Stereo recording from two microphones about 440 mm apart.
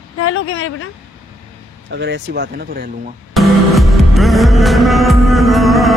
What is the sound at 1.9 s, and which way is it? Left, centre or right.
Speech, right.